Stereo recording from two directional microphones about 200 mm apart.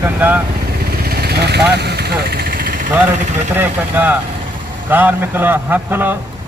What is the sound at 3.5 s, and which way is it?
A man's voice, 10° right (ahead or behind).